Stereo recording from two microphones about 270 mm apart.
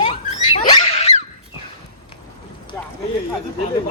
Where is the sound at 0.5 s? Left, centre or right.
Left.